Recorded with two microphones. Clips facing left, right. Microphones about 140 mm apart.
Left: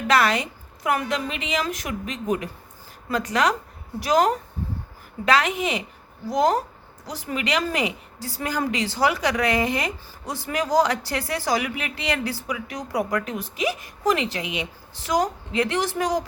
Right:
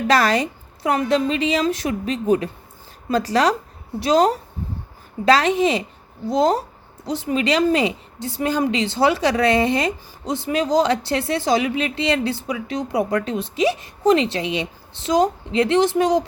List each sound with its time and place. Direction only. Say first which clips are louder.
0.1 s a woman's voice: right 2 dB; 35° right (ahead or behind)